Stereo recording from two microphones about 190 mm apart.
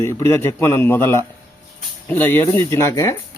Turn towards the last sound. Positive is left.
turn(degrees=15)  # may be behind; listen again after turning